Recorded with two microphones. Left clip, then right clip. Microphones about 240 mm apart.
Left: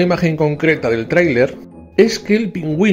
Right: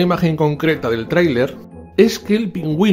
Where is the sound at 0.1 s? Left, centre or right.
Centre.